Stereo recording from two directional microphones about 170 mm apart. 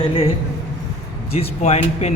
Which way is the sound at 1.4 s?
35° left (ahead or behind).